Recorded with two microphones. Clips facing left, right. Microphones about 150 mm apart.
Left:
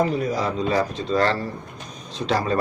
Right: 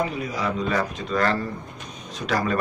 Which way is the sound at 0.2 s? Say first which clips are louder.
Left 3 dB; 40° left (ahead or behind).